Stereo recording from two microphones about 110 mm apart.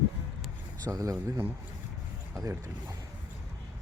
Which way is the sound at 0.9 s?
30° right (ahead or behind).